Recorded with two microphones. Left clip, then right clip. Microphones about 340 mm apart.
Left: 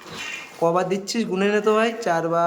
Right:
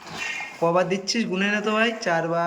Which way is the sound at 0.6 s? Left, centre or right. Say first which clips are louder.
Left 1 dB; centre.